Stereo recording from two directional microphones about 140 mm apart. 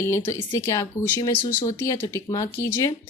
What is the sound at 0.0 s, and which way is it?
A woman's voice, 20° left (ahead or behind).